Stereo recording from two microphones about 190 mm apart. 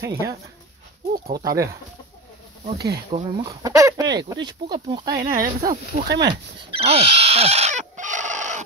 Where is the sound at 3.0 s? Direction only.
30° right (ahead or behind).